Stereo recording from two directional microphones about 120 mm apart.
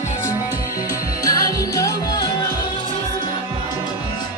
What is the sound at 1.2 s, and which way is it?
Music, 30° left (ahead or behind).